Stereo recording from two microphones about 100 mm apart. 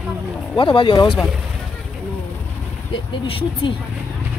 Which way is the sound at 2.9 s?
60° left (ahead or behind).